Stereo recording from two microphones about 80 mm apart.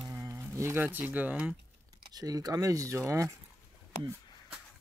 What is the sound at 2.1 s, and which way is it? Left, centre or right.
Speech, right.